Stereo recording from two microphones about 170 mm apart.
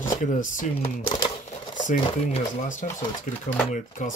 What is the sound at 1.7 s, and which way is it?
Speech, 50° left (ahead or behind).